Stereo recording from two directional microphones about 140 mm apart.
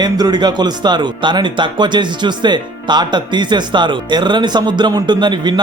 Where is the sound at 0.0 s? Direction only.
30° right (ahead or behind).